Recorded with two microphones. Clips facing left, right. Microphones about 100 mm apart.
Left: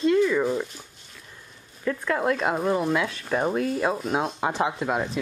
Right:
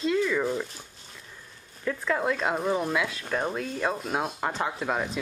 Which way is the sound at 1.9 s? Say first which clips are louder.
Left 3 dB; centre (ahead or behind).